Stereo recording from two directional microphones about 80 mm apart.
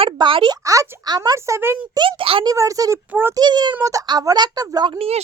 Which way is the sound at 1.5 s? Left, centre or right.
Right.